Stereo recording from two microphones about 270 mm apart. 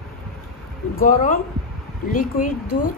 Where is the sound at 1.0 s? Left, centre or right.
Left.